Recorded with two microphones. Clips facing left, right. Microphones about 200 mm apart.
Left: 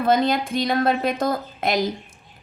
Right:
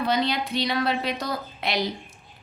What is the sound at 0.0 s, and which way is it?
A woman's voice, 50° left (ahead or behind).